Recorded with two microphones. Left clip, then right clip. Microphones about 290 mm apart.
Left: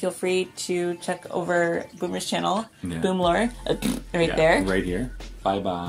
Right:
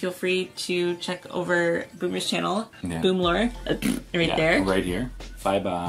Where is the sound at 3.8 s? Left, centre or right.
Centre.